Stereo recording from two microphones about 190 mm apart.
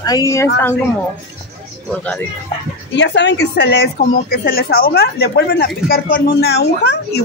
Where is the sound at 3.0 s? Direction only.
65° left (ahead or behind).